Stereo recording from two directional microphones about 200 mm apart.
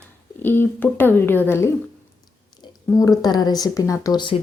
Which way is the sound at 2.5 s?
20° left (ahead or behind).